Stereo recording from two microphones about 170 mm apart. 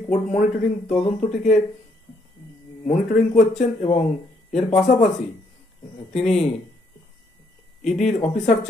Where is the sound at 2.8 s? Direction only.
50° left (ahead or behind).